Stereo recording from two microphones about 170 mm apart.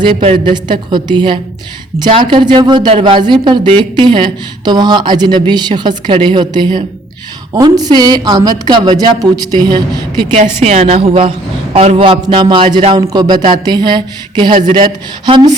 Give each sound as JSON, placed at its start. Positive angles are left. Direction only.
{"t": 0.0, "sound": "speech", "side_deg": -30}
{"t": 10.3, "sound": "a woman's voice", "side_deg": -40}